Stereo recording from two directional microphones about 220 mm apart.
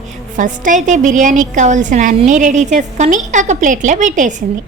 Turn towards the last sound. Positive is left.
turn(degrees=-35)  # may be behind; listen again after turning